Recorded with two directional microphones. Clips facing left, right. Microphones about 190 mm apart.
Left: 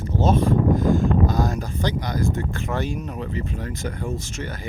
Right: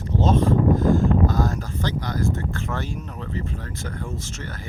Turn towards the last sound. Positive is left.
turn(degrees=15)  # may be behind; listen again after turning